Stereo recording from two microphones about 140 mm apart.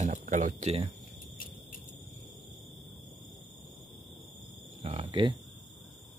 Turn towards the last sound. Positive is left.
turn(degrees=-35)  # may be behind; listen again after turning